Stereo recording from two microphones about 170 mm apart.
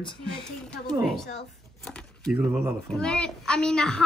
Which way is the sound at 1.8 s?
5° left (ahead or behind).